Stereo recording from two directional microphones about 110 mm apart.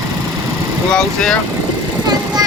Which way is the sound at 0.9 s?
5° left (ahead or behind).